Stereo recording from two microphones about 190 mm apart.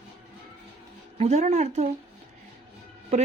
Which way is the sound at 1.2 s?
35° right (ahead or behind).